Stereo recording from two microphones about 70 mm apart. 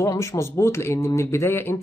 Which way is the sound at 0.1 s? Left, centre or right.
Left.